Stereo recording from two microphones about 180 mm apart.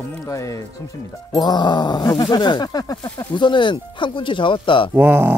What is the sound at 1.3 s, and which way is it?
Speech, 25° left (ahead or behind).